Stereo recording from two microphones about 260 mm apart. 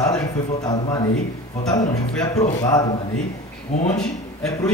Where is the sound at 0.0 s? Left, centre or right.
Centre.